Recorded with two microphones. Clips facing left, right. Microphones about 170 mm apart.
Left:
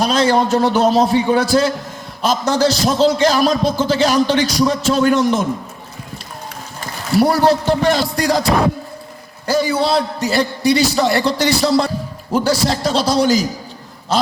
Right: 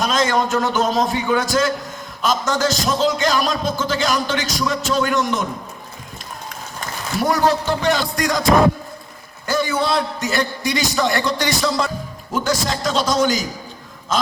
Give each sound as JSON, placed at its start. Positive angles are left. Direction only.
{"t": 0.0, "sound": "speech", "side_deg": 40}
{"t": 7.2, "sound": "speech", "side_deg": 35}
{"t": 9.5, "sound": "speech", "side_deg": 30}